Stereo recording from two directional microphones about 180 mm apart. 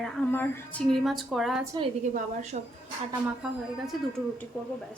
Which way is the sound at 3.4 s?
5° right (ahead or behind).